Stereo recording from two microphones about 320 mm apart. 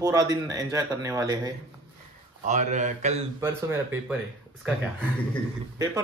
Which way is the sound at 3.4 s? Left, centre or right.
Centre.